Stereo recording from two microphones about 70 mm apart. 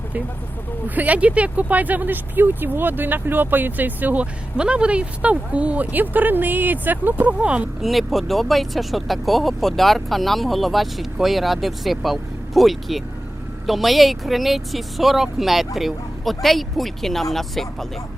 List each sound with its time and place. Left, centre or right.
0.9 s speech: right
7.8 s speech: centre